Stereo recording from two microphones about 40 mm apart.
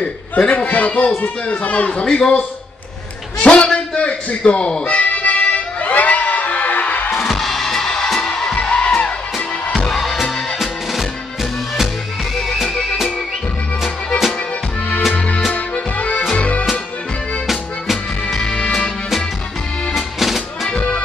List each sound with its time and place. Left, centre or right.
0.0 s a man's voice: left
4.8 s music: left
7.1 s music: centre
8.5 s music: left
9.8 s music: centre
15.1 s music: left
15.5 s accordion: left
16.3 s music: left
18.4 s music: left
19.9 s music: centre
20.7 s music: left